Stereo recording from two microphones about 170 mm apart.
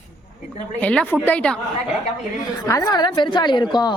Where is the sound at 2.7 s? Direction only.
20° left (ahead or behind).